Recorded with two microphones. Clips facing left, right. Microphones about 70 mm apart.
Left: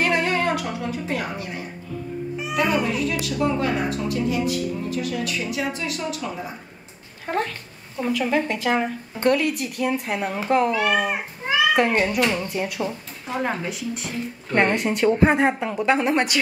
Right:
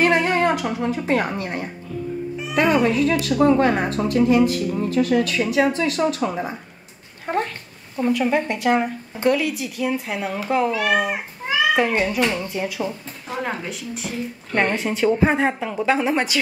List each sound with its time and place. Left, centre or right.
0.0 s a sound: right
1.0 s a woman's voice: right
4.5 s speech: right
5.5 s speech: right
7.2 s a woman's voice: centre